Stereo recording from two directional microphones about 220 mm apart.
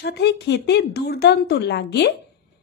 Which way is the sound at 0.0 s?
50° left (ahead or behind).